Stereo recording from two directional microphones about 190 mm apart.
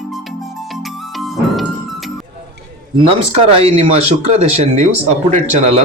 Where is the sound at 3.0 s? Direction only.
35° right (ahead or behind).